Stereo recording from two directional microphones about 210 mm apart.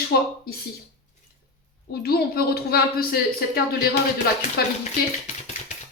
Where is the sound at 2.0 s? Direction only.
45° left (ahead or behind).